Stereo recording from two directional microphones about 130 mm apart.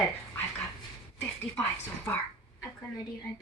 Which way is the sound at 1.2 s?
10° left (ahead or behind).